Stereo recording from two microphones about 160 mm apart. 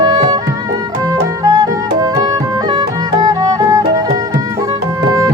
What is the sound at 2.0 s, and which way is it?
Music, 25° right (ahead or behind).